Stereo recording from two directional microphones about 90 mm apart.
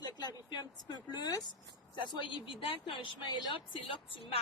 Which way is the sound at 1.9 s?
60° left (ahead or behind).